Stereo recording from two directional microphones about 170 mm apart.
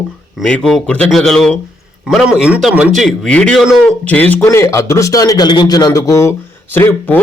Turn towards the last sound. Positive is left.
turn(degrees=10)  # may be behind; listen again after turning